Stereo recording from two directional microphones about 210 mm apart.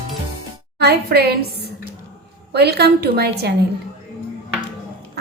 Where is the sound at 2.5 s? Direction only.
50° right (ahead or behind).